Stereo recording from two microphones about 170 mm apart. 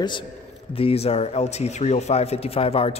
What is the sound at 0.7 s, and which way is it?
A man's voice, 35° left (ahead or behind).